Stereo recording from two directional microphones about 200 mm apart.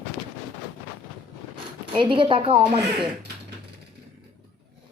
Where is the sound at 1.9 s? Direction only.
25° right (ahead or behind).